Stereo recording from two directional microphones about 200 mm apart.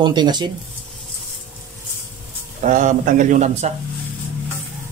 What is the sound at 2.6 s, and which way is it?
A man's voice, 40° right (ahead or behind).